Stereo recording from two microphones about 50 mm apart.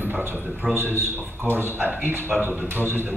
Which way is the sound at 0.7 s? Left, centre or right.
Right.